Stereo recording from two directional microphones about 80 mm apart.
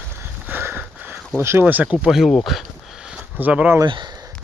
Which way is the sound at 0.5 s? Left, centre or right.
Right.